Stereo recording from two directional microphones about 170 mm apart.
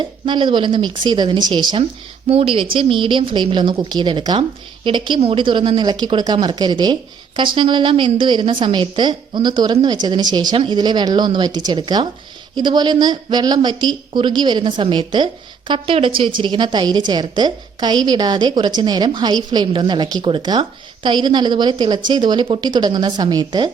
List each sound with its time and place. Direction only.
0.0 s a woman's voice: 30° right (ahead or behind)